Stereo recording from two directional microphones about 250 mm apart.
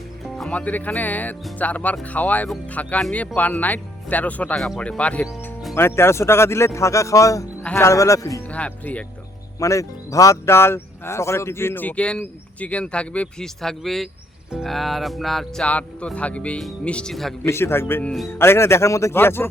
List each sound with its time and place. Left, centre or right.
0.3 s speech: centre